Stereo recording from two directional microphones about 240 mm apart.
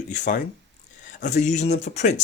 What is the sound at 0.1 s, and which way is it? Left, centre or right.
Speech, left.